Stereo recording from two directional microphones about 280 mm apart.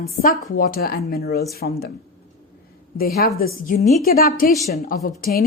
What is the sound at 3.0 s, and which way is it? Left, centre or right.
Speech, left.